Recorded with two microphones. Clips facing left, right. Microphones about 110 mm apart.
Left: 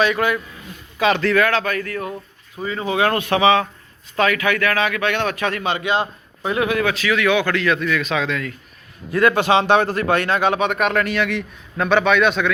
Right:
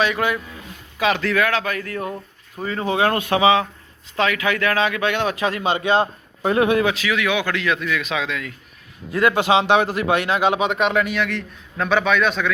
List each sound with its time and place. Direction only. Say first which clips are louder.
0.0 s a man's voice: left 2 dB; 15° right (ahead or behind)
2.6 s a man's voice: even; 35° right (ahead or behind); by 11.2 s 10° right (ahead or behind)
11.2 s speech: left 2 dB; 5° left (ahead or behind)